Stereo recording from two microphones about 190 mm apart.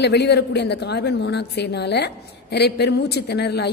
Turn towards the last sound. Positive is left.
turn(degrees=60)  # may be behind; listen again after turning